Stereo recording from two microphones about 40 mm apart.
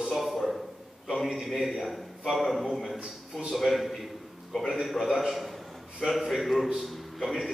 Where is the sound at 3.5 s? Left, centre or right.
Centre.